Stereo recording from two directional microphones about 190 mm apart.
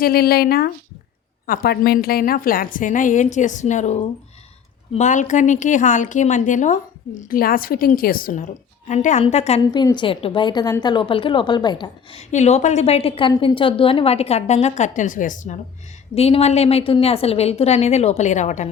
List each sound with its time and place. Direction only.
0.0 s a woman's voice: 55° left (ahead or behind); by 9.6 s 35° left (ahead or behind)
9.7 s a woman's voice: 25° left (ahead or behind)
12.3 s a woman's voice: 35° left (ahead or behind)
16.1 s a woman's voice: 30° left (ahead or behind)